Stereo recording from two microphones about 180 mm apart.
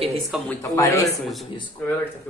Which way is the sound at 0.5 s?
20° left (ahead or behind).